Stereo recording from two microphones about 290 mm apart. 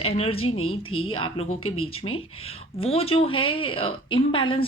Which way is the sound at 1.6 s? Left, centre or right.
Left.